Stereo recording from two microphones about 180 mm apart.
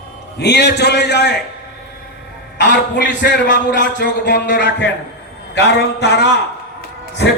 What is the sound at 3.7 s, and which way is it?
Speech, 45° left (ahead or behind).